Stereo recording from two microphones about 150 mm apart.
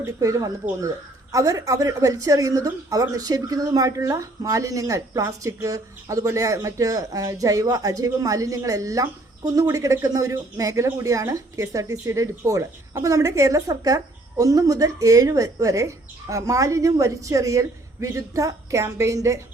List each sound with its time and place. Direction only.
0.0 s speech: 20° right (ahead or behind)